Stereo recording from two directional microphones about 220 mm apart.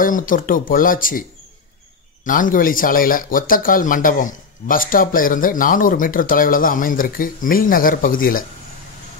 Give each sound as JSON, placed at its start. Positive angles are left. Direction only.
{"t": 0.0, "sound": "speech", "side_deg": 40}
{"t": 2.2, "sound": "speech", "side_deg": 35}